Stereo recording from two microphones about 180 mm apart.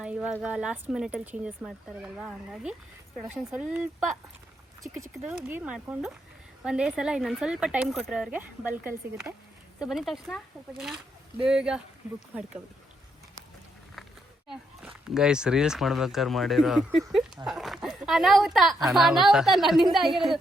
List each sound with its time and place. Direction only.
0.0 s a sound: 5° right (ahead or behind)
0.4 s speech: 5° right (ahead or behind)
4.8 s speech: 15° right (ahead or behind)
14.4 s speech: 5° right (ahead or behind)